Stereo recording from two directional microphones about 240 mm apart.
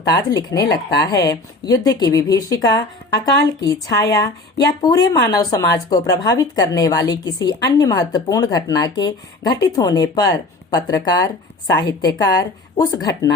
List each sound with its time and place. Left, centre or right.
0.2 s speech: centre
0.7 s speech: left
1.0 s speech: centre